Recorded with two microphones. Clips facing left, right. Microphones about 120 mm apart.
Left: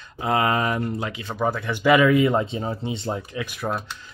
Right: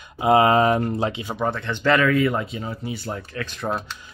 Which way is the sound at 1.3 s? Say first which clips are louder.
Left 1 dB; 5° left (ahead or behind).